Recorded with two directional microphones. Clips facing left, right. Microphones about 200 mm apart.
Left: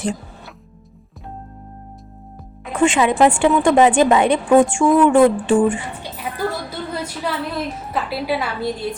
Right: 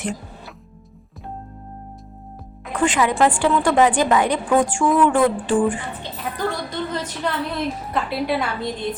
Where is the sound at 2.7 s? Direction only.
25° left (ahead or behind).